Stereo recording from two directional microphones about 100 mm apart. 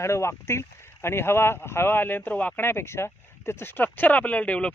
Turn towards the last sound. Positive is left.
turn(degrees=10)  # may be behind; listen again after turning